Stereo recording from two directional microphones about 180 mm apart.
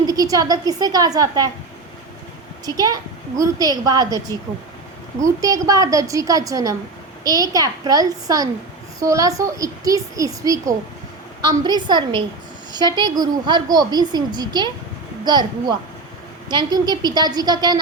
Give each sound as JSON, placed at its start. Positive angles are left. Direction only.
{"t": 0.0, "sound": "a woman's voice", "side_deg": -20}
{"t": 2.6, "sound": "a woman's voice", "side_deg": -20}
{"t": 16.5, "sound": "a woman's voice", "side_deg": -25}